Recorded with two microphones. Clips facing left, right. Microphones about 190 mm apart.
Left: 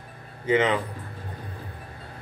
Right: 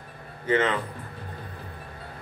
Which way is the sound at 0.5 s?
15° left (ahead or behind).